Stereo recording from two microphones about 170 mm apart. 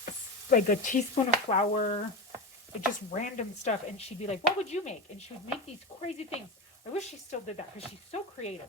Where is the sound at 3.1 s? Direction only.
45° left (ahead or behind).